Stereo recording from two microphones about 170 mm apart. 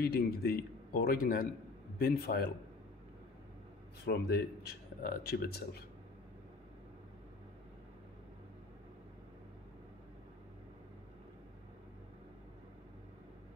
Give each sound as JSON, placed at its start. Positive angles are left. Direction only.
{"t": 0.0, "sound": "speech", "side_deg": 65}
{"t": 4.0, "sound": "a man's voice", "side_deg": 70}